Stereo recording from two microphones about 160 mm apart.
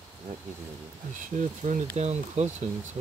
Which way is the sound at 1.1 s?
50° right (ahead or behind).